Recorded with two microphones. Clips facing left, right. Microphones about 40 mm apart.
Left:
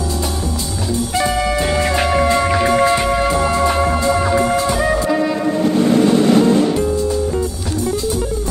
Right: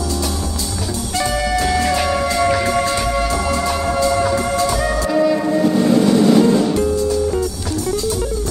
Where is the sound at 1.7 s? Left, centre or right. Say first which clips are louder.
Left 1 dB; left.